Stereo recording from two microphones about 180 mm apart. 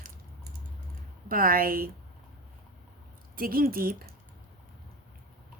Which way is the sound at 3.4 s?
55° right (ahead or behind).